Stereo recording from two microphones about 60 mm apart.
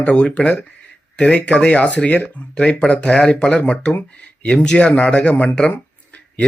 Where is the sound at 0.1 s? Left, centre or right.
Centre.